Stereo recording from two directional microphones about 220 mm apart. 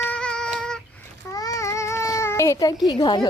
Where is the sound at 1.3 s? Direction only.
15° left (ahead or behind).